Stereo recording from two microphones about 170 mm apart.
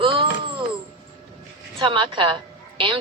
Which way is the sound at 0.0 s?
30° right (ahead or behind).